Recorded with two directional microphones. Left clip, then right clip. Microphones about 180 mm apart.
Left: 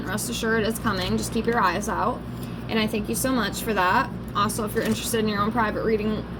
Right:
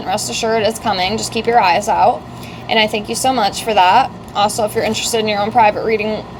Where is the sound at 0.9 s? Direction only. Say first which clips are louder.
Right 10 dB; 45° right (ahead or behind).